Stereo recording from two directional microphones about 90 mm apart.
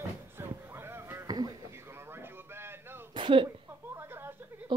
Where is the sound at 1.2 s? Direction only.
50° right (ahead or behind).